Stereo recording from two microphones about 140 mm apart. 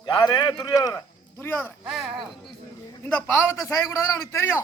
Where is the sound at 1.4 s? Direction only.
15° left (ahead or behind).